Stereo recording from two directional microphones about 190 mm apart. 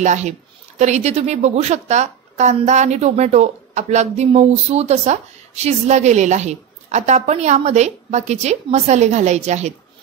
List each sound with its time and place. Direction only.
0.0 s a woman's voice: 40° right (ahead or behind)